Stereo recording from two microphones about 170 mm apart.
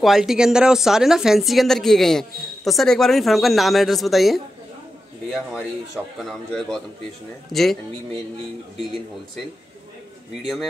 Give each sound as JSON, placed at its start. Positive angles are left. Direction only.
{"t": 0.0, "sound": "speech", "side_deg": 0}
{"t": 10.4, "sound": "speech", "side_deg": 0}